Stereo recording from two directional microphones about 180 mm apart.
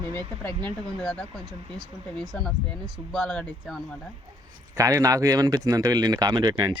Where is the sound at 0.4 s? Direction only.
5° left (ahead or behind).